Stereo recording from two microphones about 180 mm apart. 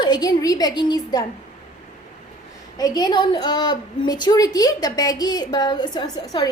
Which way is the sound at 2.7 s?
20° left (ahead or behind).